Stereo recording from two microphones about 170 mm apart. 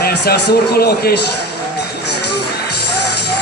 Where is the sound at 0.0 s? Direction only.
65° left (ahead or behind).